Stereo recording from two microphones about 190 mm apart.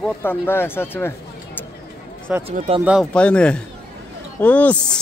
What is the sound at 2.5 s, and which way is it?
Speech, 35° right (ahead or behind).